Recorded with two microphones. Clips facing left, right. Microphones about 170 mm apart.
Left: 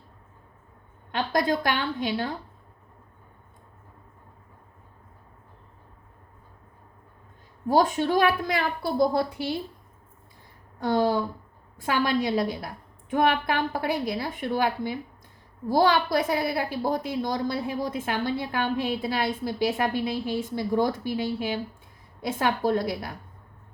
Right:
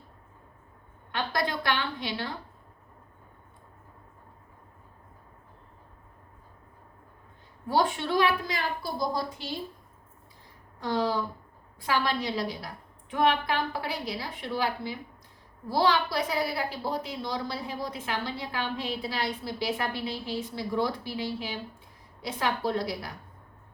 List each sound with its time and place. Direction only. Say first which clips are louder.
1.3 s a woman's voice: left 5 dB; 45° left (ahead or behind)
7.7 s a woman's voice: left 5 dB; 40° left (ahead or behind); by 9.6 s 60° left (ahead or behind)
10.8 s a woman's voice: left 5 dB; 45° left (ahead or behind)